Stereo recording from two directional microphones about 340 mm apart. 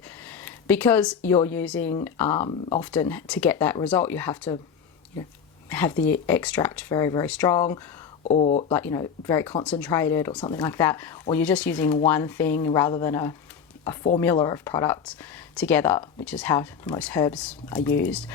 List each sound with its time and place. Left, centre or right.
0.3 s a sound: centre
1.4 s speech: centre
5.6 s a woman's voice: centre
8.2 s speech: centre
8.7 s speech: centre